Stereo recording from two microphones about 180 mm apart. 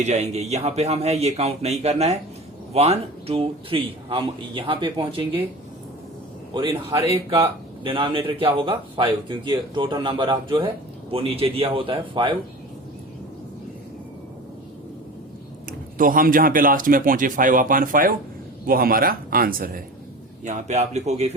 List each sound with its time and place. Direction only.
0.0 s a man's voice: 40° right (ahead or behind)
6.5 s a man's voice: 25° right (ahead or behind)
16.0 s speech: 50° right (ahead or behind)
20.4 s speech: 40° right (ahead or behind)